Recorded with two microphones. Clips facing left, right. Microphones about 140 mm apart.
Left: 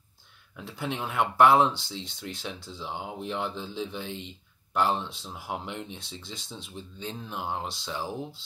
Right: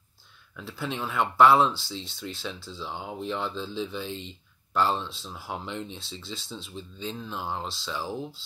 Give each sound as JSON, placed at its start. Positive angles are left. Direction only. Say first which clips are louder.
{"t": 0.6, "sound": "speech", "louder": "even", "side_deg": 20}